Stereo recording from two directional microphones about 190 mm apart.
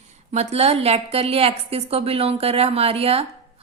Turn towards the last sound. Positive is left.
turn(degrees=-30)  # may be behind; listen again after turning